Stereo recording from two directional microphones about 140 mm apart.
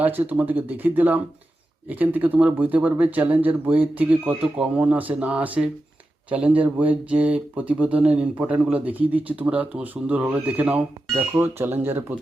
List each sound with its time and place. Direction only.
0.0 s speech: 10° right (ahead or behind)